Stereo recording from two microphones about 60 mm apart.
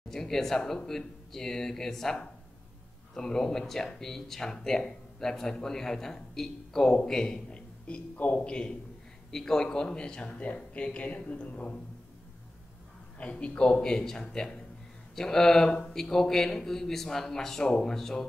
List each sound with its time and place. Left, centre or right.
0.1 s a man's voice: centre; by 11.8 s left
13.2 s a man's voice: left